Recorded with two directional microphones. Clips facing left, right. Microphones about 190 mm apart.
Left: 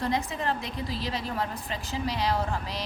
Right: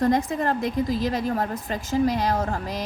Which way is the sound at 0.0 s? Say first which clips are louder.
Right 7 dB; 45° right (ahead or behind).